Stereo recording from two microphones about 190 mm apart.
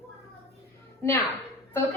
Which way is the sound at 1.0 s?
15° left (ahead or behind).